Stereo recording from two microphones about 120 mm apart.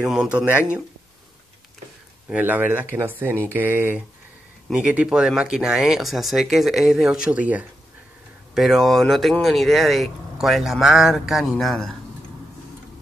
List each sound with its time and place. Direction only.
0.0 s speech: 5° right (ahead or behind)
2.2 s speech: 15° right (ahead or behind)
8.5 s speech: centre (ahead or behind)